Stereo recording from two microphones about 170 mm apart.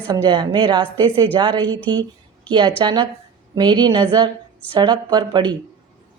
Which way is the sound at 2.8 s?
25° right (ahead or behind).